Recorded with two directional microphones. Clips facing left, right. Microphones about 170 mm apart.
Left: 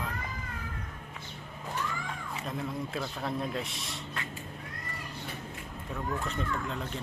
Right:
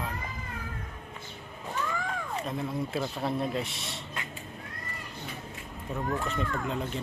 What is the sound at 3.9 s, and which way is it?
Vehicle, 20° right (ahead or behind).